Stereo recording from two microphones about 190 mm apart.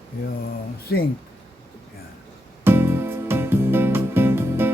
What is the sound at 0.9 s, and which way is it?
Speech, 55° left (ahead or behind).